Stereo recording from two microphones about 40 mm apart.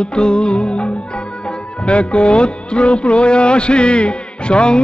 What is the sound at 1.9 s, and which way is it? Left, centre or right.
Speech, left.